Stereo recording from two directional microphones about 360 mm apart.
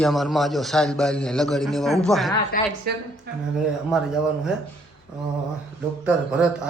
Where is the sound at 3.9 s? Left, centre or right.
Centre.